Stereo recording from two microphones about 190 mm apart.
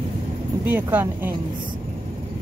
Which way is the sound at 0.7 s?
10° right (ahead or behind).